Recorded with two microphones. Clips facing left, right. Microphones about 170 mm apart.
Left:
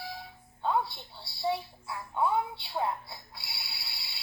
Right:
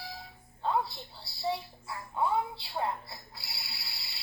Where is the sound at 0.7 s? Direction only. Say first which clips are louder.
Left 1 dB; centre (ahead or behind).